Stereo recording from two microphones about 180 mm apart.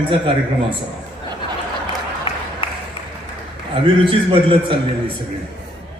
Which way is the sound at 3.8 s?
30° right (ahead or behind).